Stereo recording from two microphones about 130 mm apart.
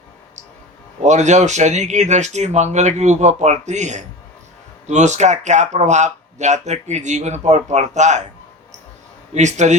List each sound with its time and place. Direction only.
1.0 s speech: 65° right (ahead or behind)
9.3 s speech: 65° right (ahead or behind)